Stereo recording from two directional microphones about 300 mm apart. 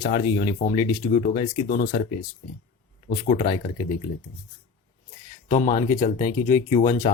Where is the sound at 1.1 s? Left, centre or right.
Left.